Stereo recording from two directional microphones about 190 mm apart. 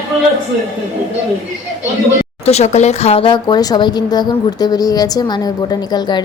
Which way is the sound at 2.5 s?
35° left (ahead or behind).